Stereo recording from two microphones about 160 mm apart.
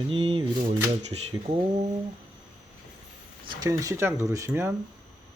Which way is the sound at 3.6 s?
20° right (ahead or behind).